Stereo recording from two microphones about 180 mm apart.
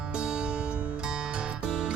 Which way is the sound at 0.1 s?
5° right (ahead or behind).